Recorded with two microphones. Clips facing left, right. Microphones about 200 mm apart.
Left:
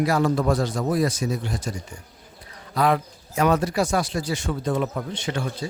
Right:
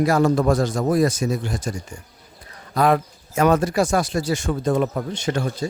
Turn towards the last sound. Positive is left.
turn(degrees=-45)  # may be behind; listen again after turning